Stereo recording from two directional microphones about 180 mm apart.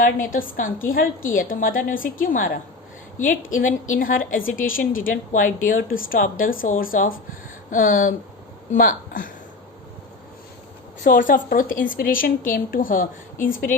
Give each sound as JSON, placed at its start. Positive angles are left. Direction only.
{"t": 0.3, "sound": "a woman's voice", "side_deg": 50}
{"t": 11.0, "sound": "a woman's voice", "side_deg": 50}